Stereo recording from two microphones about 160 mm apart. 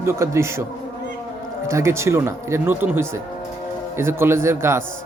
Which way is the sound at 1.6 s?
15° right (ahead or behind).